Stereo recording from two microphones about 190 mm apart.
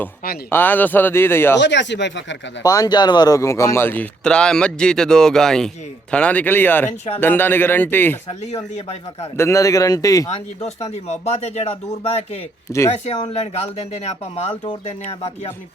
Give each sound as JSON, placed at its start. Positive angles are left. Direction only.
{"t": 0.5, "sound": "a man's voice", "side_deg": 10}
{"t": 1.5, "sound": "speech", "side_deg": 65}
{"t": 2.6, "sound": "a man's voice", "side_deg": 20}
{"t": 8.3, "sound": "speech", "side_deg": 30}
{"t": 9.4, "sound": "a man's voice", "side_deg": 15}
{"t": 10.2, "sound": "speech", "side_deg": 35}
{"t": 12.7, "sound": "a man's voice", "side_deg": 15}
{"t": 14.3, "sound": "speech", "side_deg": 30}